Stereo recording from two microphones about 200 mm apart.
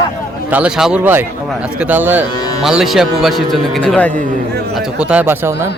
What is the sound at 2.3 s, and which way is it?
Speech, 20° left (ahead or behind).